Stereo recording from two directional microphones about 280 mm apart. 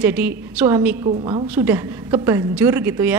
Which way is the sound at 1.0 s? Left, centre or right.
Centre.